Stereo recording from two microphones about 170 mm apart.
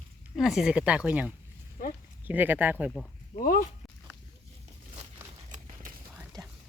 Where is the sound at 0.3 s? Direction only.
Centre (ahead or behind).